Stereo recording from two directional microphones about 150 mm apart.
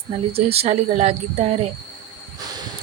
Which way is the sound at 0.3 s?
40° right (ahead or behind).